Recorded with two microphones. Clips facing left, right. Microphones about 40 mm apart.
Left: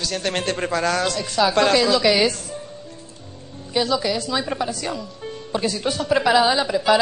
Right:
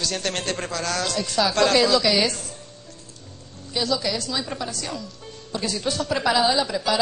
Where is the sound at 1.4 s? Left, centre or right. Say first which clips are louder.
Left 2 dB; centre.